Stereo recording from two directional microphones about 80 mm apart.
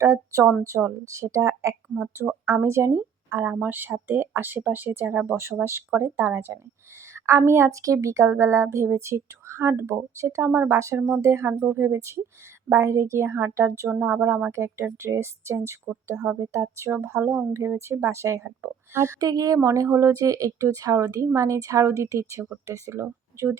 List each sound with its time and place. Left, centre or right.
0.0 s a woman's voice: right
19.2 s a woman's voice: right